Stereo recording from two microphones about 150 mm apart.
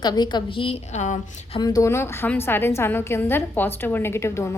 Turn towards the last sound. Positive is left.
turn(degrees=20)  # may be behind; listen again after turning